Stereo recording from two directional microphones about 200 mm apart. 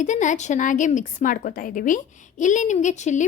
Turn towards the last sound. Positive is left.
turn(degrees=35)  # may be behind; listen again after turning